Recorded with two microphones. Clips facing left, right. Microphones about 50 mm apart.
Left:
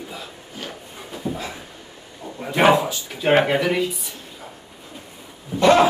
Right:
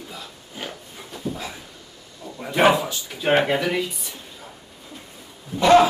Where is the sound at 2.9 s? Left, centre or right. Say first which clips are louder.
Left 2 dB; centre.